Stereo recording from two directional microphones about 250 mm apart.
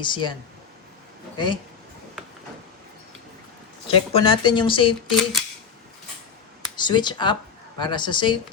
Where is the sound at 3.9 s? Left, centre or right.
Left.